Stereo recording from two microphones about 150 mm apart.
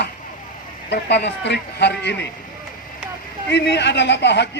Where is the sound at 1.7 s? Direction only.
90° left.